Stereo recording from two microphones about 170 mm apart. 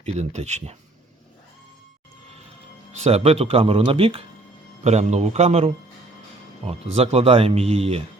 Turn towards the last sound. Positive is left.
turn(degrees=-35)  # may be behind; listen again after turning